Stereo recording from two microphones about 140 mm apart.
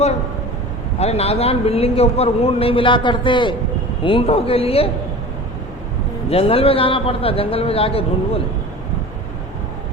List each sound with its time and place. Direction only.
0.9 s speech: 50° left (ahead or behind)
6.3 s speech: 40° left (ahead or behind)